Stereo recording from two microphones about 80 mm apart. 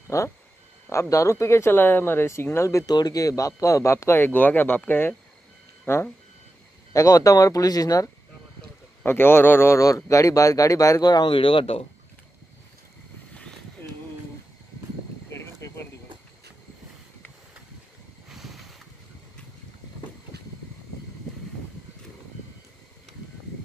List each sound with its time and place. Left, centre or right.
0.1 s speech: left
2.9 s speech: left
4.3 s speech: left
6.9 s speech: left
9.0 s speech: left
9.8 s speech: left
15.6 s a sound: left
18.3 s a sound: centre